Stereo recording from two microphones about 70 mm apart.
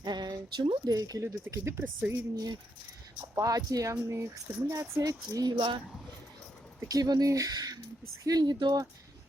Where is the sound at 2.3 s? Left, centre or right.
Right.